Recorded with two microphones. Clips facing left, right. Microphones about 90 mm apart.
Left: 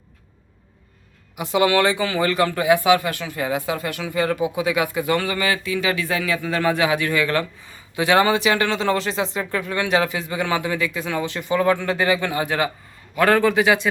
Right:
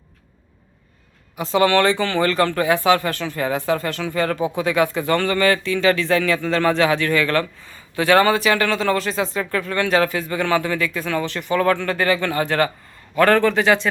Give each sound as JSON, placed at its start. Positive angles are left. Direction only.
{"t": 1.4, "sound": "speech", "side_deg": 15}